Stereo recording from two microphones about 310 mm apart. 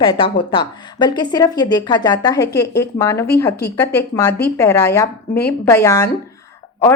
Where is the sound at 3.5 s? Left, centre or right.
Left.